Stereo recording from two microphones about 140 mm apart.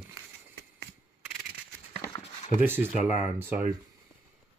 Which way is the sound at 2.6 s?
15° right (ahead or behind).